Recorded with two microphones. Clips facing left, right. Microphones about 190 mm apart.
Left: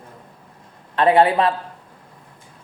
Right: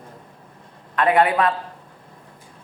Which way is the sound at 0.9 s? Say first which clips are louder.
Left 3 dB; 30° left (ahead or behind).